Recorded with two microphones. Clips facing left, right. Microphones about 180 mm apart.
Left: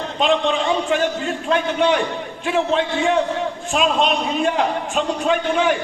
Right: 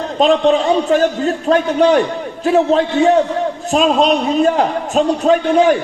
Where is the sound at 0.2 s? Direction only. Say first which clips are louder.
Right 7 dB; 40° right (ahead or behind).